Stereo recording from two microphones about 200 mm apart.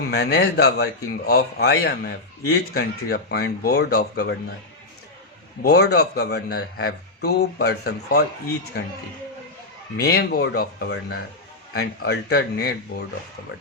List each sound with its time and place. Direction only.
0.1 s a man's voice: 55° left (ahead or behind)
5.6 s a man's voice: 55° left (ahead or behind)
10.0 s a man's voice: 55° left (ahead or behind)